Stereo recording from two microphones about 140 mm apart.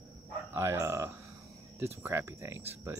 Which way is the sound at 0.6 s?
20° right (ahead or behind).